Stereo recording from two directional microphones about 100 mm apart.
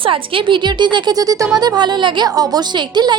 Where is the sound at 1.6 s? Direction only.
45° right (ahead or behind).